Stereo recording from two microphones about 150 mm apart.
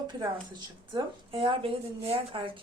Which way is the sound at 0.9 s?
35° right (ahead or behind).